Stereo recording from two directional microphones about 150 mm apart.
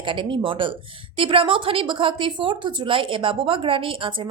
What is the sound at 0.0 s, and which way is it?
A woman's voice, 35° right (ahead or behind).